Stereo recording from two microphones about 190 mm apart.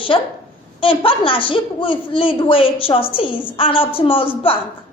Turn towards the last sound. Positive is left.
turn(degrees=30)  # may be behind; listen again after turning